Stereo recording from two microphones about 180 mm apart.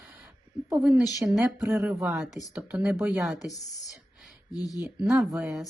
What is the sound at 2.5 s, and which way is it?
Speech, 10° right (ahead or behind).